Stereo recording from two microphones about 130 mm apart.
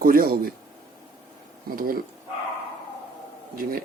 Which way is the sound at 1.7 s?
90° right.